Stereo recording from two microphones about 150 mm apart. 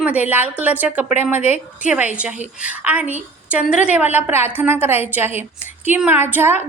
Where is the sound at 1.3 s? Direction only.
50° left (ahead or behind).